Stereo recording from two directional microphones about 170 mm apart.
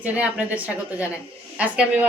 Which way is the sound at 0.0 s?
10° right (ahead or behind).